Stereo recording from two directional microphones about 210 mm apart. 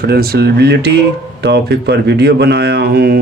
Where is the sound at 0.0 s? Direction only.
45° right (ahead or behind).